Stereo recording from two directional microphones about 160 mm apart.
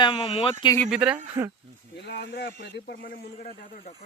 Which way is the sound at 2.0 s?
90° left.